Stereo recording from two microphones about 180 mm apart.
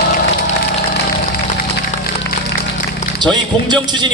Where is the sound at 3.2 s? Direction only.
25° right (ahead or behind).